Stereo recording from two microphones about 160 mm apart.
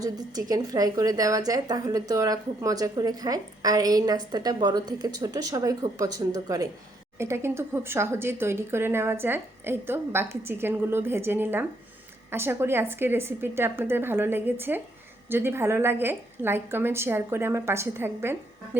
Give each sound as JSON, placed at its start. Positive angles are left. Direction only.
{"t": 0.0, "sound": "a woman's voice", "side_deg": -20}